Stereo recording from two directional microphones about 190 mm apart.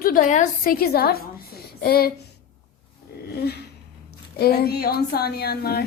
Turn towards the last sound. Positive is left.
turn(degrees=55)  # may be behind; listen again after turning